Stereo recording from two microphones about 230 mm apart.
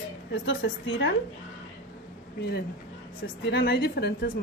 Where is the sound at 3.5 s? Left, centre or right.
Left.